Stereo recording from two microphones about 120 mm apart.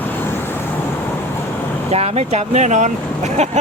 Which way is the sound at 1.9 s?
60° right (ahead or behind).